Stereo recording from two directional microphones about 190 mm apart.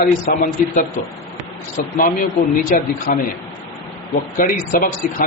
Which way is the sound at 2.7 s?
45° left (ahead or behind).